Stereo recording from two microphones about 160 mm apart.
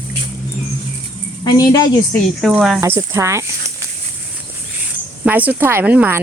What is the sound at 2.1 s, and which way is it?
Speech, centre (ahead or behind).